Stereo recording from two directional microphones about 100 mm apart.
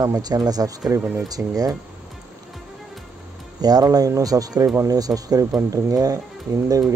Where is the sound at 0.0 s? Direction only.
40° right (ahead or behind).